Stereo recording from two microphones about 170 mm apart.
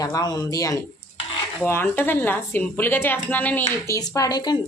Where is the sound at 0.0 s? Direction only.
20° left (ahead or behind).